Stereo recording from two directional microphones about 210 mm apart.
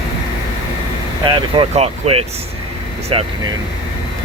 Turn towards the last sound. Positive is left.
turn(degrees=-25)  # may be behind; listen again after turning